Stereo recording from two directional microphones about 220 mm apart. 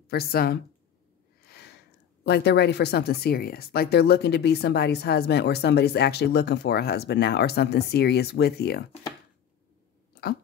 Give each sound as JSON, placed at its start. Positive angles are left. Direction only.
{"t": 0.1, "sound": "speech", "side_deg": 45}
{"t": 1.4, "sound": "a sound", "side_deg": 45}
{"t": 2.2, "sound": "speech", "side_deg": 50}
{"t": 10.2, "sound": "chewing", "side_deg": 45}